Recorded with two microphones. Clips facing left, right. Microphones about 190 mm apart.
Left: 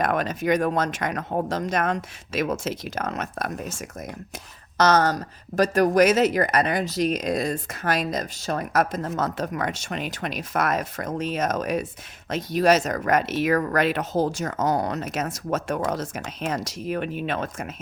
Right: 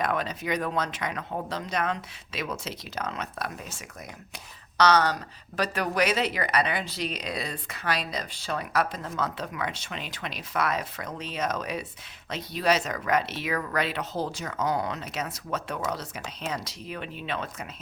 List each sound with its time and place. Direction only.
0.0 s speech: 50° left (ahead or behind)